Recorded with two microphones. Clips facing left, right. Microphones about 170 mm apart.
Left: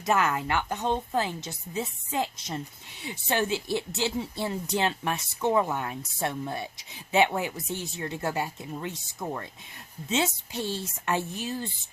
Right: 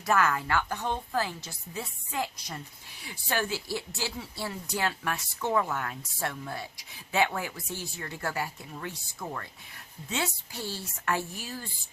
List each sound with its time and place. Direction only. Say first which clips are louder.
0.0 s speech: left 1 dB; 20° left (ahead or behind)